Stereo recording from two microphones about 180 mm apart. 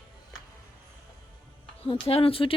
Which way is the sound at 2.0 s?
30° left (ahead or behind).